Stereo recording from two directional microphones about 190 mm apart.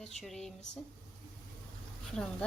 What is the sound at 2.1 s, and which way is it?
Speech, 5° left (ahead or behind).